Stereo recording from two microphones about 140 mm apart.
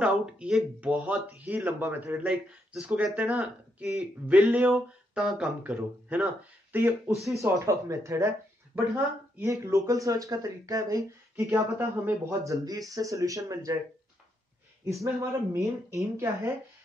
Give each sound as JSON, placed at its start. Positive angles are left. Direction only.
{"t": 0.0, "sound": "speech", "side_deg": -5}
{"t": 14.9, "sound": "speech", "side_deg": -20}